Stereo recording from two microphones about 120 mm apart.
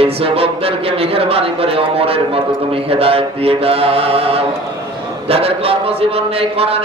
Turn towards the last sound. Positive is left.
turn(degrees=-55)  # may be behind; listen again after turning